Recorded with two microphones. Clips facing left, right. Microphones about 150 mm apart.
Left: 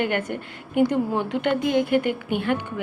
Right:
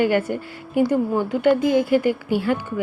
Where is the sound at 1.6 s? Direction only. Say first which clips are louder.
Right 3 dB; 65° left (ahead or behind).